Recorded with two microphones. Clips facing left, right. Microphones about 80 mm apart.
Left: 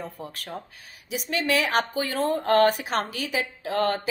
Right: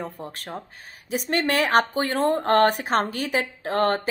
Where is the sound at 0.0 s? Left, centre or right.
Right.